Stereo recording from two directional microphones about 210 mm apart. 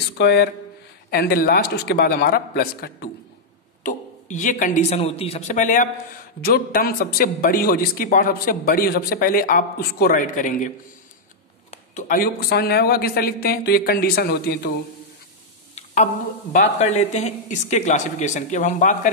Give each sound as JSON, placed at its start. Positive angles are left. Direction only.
{"t": 0.2, "sound": "a man's voice", "side_deg": 50}
{"t": 11.7, "sound": "a man's voice", "side_deg": 35}
{"t": 15.7, "sound": "a sound", "side_deg": 35}
{"t": 16.5, "sound": "speech", "side_deg": 30}